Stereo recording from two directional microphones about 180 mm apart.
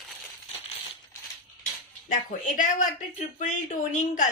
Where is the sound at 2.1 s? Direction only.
45° left (ahead or behind).